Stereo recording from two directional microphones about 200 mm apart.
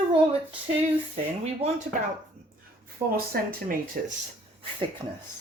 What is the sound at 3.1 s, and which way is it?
Speech, 50° right (ahead or behind).